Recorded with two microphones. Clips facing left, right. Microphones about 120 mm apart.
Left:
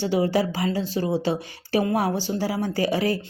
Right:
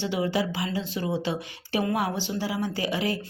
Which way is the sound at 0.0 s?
35° left (ahead or behind).